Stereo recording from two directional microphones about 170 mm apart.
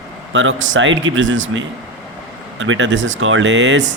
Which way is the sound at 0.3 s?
90° right.